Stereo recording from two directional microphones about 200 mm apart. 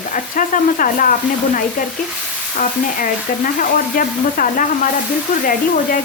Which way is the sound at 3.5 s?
40° left (ahead or behind).